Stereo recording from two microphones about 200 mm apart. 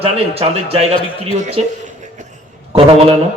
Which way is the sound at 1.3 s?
35° right (ahead or behind).